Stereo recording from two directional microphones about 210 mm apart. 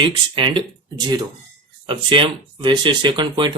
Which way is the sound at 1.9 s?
25° right (ahead or behind).